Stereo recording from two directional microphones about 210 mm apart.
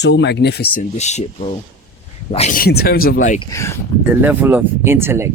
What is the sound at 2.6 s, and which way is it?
Speech, 45° left (ahead or behind).